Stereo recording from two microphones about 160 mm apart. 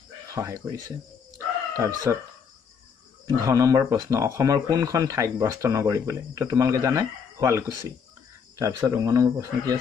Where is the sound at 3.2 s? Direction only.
20° right (ahead or behind).